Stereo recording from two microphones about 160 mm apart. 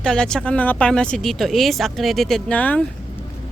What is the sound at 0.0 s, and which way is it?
Speech, 5° left (ahead or behind).